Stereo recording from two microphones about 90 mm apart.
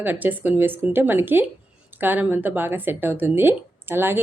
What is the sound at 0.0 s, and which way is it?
Speech, 20° right (ahead or behind).